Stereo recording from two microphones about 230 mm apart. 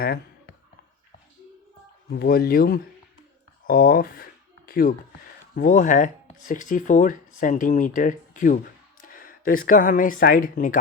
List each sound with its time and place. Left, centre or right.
2.1 s speech: left